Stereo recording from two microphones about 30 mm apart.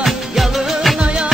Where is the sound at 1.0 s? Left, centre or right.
Right.